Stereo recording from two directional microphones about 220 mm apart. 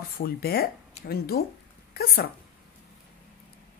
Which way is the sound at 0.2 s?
45° left (ahead or behind).